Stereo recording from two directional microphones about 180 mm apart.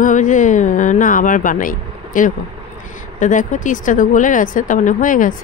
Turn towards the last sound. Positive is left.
turn(degrees=50)  # may be behind; listen again after turning